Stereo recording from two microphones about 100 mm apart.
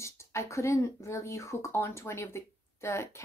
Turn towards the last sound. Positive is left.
turn(degrees=25)  # may be behind; listen again after turning